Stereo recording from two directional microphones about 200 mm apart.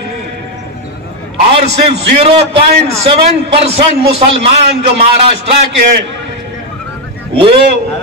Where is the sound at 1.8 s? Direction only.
30° right (ahead or behind).